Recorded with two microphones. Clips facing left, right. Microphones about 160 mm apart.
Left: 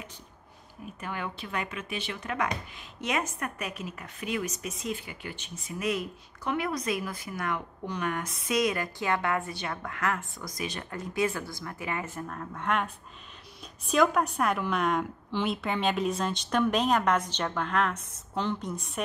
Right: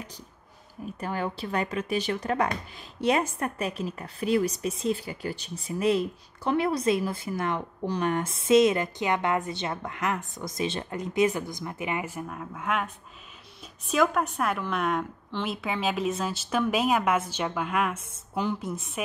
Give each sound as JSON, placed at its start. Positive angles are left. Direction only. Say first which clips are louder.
{"t": 1.0, "sound": "a woman's voice", "louder": "right 5 dB", "side_deg": -35}